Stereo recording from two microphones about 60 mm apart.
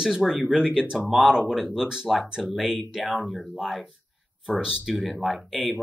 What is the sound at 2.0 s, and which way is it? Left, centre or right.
Speech, centre.